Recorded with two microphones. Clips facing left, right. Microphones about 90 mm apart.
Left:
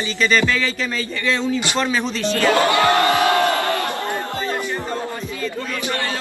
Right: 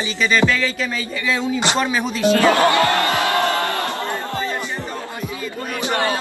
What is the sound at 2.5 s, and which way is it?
Music, 20° left (ahead or behind).